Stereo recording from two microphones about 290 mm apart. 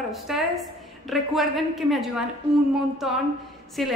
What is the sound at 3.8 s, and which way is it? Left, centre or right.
Speech, centre.